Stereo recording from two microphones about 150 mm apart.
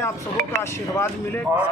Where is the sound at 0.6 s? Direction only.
15° left (ahead or behind).